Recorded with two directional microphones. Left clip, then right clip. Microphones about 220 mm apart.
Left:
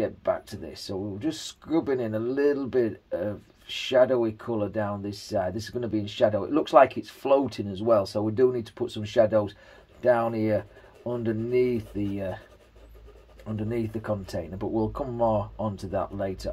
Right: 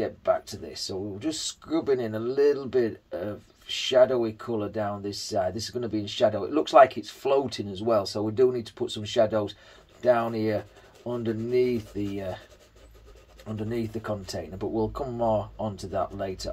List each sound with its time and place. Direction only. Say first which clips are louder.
0.0 s speech: right 1 dB; 30° left (ahead or behind)
13.5 s speech: left 1 dB; 30° left (ahead or behind)